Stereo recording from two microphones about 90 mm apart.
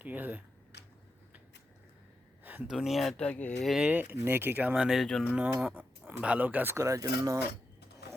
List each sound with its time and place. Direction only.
0.0 s speech: 20° right (ahead or behind)
2.4 s a sound: 20° right (ahead or behind)
2.6 s speech: centre (ahead or behind)
3.2 s speech: 15° left (ahead or behind)
3.6 s speech: 5° right (ahead or behind)
3.8 s speech: 15° right (ahead or behind)
6.7 s speech: 35° right (ahead or behind)